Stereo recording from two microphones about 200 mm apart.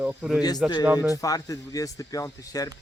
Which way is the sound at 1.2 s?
15° left (ahead or behind).